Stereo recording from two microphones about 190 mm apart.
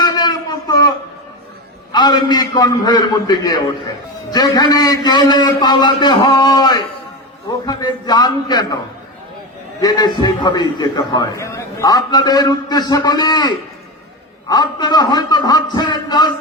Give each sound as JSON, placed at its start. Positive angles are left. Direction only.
{"t": 0.0, "sound": "a sound", "side_deg": 20}
{"t": 1.9, "sound": "a man's voice", "side_deg": 20}
{"t": 9.8, "sound": "a man's voice", "side_deg": 20}